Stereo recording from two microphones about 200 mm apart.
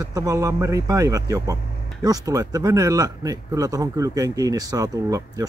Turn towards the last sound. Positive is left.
turn(degrees=-15)  # may be behind; listen again after turning